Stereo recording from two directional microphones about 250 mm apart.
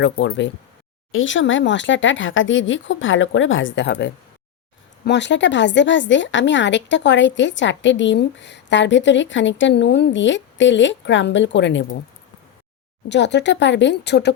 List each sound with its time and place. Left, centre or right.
0.0 s a woman's voice: left
13.1 s a woman's voice: left